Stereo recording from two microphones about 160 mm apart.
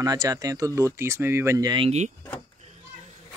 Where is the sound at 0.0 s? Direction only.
25° right (ahead or behind).